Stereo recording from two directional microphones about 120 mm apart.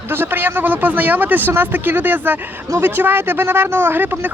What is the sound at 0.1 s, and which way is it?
Speech, 15° right (ahead or behind).